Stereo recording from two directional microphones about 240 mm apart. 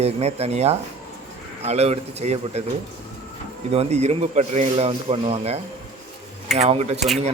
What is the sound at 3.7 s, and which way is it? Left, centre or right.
Speech, right.